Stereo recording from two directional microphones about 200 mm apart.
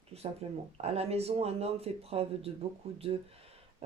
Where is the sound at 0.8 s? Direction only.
30° right (ahead or behind).